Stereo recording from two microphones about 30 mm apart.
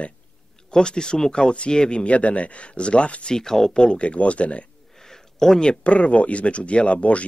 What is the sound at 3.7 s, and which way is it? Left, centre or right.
Speech, left.